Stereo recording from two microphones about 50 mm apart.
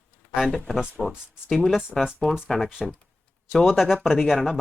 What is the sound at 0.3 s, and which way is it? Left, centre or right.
Speech, centre.